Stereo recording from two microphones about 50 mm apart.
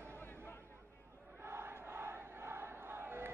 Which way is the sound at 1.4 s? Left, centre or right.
Right.